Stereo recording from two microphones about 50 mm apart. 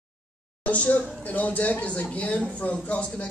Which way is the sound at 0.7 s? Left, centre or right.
Left.